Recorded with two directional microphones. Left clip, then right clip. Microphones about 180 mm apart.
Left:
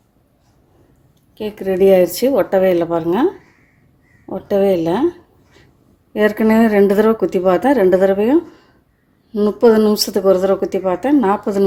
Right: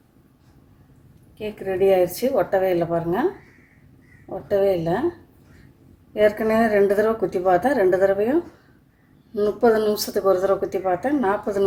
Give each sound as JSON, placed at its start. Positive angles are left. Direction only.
{"t": 1.4, "sound": "speech", "side_deg": 65}
{"t": 4.4, "sound": "speech", "side_deg": 50}
{"t": 6.1, "sound": "speech", "side_deg": 50}